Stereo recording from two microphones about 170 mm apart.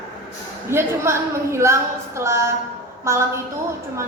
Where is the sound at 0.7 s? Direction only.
15° right (ahead or behind).